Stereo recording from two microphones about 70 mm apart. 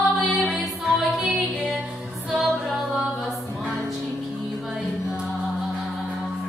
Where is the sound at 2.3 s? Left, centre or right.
Centre.